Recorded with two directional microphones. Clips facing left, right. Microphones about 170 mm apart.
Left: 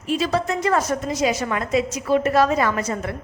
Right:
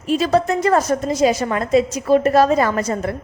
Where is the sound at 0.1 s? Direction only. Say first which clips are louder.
Right 5 dB; 45° right (ahead or behind).